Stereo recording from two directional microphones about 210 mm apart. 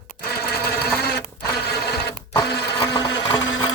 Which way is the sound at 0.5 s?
45° left (ahead or behind).